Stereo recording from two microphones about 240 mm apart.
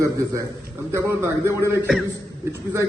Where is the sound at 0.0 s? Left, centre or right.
Centre.